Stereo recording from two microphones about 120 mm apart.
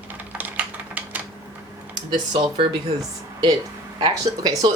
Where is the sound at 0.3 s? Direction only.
15° right (ahead or behind).